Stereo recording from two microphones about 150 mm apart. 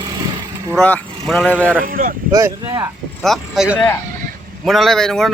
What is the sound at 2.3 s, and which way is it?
Speech, 25° right (ahead or behind).